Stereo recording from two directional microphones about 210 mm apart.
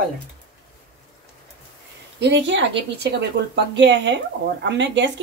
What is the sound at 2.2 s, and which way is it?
A woman's voice, 60° right (ahead or behind).